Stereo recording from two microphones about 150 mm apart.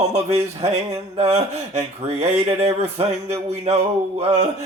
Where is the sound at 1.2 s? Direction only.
45° right (ahead or behind).